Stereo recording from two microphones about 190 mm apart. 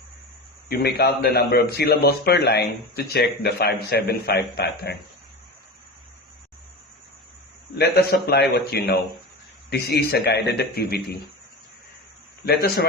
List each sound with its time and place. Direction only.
0.7 s speech: 55° left (ahead or behind)
7.8 s speech: 60° left (ahead or behind)
10.0 s speech: 55° left (ahead or behind)
12.5 s speech: 55° left (ahead or behind)